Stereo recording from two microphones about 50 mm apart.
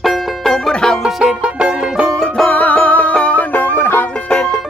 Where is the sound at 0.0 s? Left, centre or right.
Centre.